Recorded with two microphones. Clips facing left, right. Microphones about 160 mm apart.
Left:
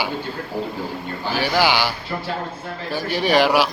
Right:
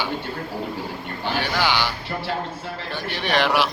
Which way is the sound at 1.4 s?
5° left (ahead or behind).